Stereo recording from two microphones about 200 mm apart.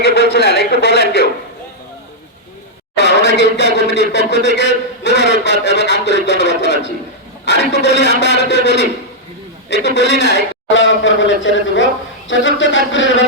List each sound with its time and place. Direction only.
0.0 s a man's voice: 55° left (ahead or behind)
2.9 s a man's voice: 60° left (ahead or behind)